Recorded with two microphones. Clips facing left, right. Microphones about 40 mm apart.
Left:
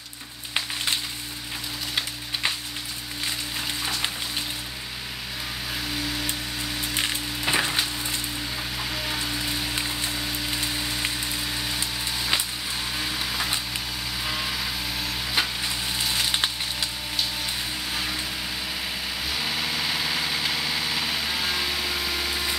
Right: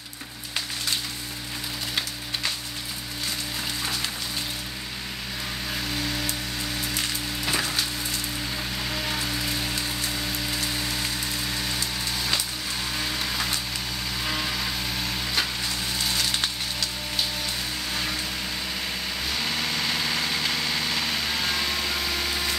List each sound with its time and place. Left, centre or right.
5.9 s a sound: centre
7.0 s frying: left
8.9 s music: centre
9.8 s music: centre
10.1 s rain on surface: centre
11.0 s a sound: centre
12.9 s vehicle: centre
15.3 s a sound: centre
17.9 s vehicle: centre
19.2 s vehicle: centre